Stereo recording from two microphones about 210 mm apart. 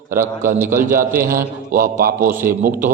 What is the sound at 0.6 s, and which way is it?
Speech, 10° right (ahead or behind).